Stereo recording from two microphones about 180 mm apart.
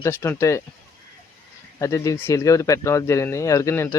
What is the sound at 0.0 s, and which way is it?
Speech, 15° left (ahead or behind).